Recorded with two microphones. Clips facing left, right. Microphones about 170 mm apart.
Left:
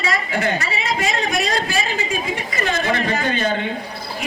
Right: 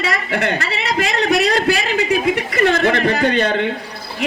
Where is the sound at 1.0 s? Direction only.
65° right (ahead or behind).